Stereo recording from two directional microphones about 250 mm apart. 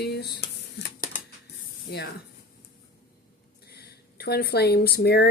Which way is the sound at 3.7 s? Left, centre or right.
Left.